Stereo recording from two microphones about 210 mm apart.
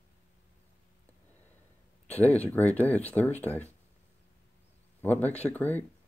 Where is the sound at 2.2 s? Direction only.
10° left (ahead or behind).